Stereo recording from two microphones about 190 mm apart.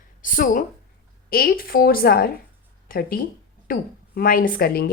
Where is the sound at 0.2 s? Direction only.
45° left (ahead or behind).